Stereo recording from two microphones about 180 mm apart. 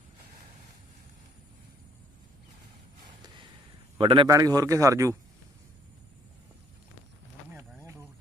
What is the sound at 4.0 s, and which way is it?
A man's voice, 25° right (ahead or behind).